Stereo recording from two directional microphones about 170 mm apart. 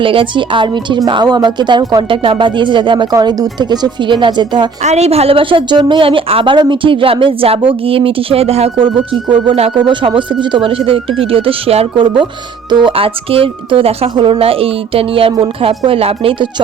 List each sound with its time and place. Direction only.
0.0 s a woman's voice: 30° right (ahead or behind)
4.8 s a woman's voice: 40° right (ahead or behind)